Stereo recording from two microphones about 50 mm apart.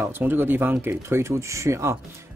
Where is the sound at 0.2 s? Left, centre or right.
Right.